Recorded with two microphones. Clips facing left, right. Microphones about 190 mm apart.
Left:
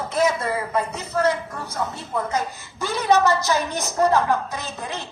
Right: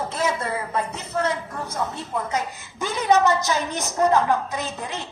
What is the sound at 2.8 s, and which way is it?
A woman's voice, 15° right (ahead or behind).